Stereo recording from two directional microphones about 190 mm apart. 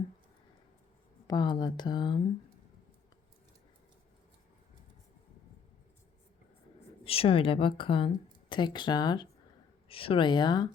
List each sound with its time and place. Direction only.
1.3 s a woman's voice: 25° left (ahead or behind)
7.0 s a woman's voice: 30° left (ahead or behind)